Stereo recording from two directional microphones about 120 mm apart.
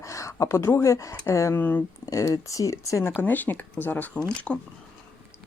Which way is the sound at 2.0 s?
30° left (ahead or behind).